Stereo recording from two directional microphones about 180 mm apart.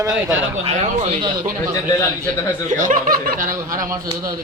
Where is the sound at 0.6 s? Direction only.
35° right (ahead or behind).